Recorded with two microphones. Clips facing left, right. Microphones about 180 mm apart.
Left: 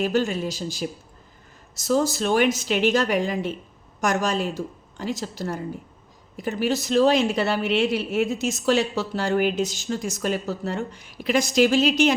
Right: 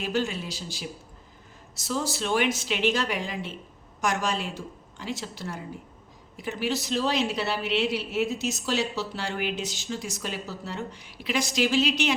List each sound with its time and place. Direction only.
0.0 s speech: 45° left (ahead or behind)